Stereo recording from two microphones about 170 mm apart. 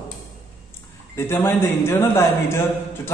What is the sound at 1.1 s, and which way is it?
A man's voice, 15° left (ahead or behind).